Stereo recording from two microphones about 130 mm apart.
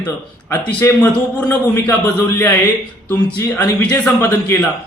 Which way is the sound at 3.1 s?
15° left (ahead or behind).